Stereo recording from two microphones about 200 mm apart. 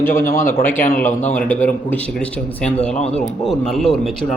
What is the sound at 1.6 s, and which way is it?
Speech, 10° left (ahead or behind).